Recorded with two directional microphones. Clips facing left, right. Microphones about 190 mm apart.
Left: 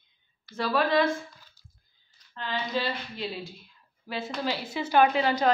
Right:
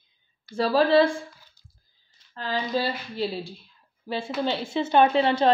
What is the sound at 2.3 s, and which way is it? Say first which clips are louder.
A woman's voice: right 4 dB; 35° right (ahead or behind).